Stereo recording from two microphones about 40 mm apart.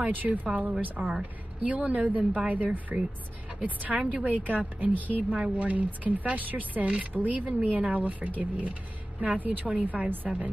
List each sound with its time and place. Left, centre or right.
0.0 s a woman's voice: right